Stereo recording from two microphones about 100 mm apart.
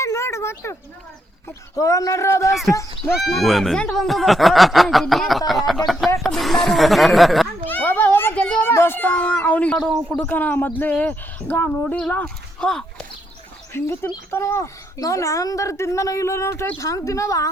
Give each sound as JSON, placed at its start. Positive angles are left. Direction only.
{"t": 0.0, "sound": "a sound", "side_deg": 30}
{"t": 1.5, "sound": "a man's voice", "side_deg": 30}
{"t": 2.5, "sound": "speech", "side_deg": 0}
{"t": 7.7, "sound": "a sound", "side_deg": 20}
{"t": 8.7, "sound": "speech", "side_deg": 25}
{"t": 13.7, "sound": "a man's voice", "side_deg": 25}